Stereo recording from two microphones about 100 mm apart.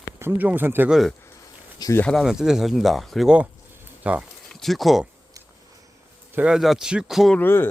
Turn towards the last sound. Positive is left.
turn(degrees=20)  # may be behind; listen again after turning